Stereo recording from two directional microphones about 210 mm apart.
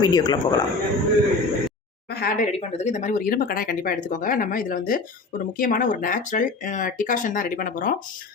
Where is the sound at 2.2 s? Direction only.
40° left (ahead or behind).